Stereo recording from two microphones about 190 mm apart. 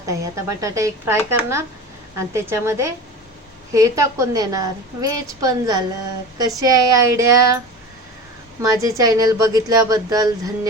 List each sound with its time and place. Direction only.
0.0 s a woman's voice: 15° right (ahead or behind)
8.7 s a woman's voice: 20° right (ahead or behind)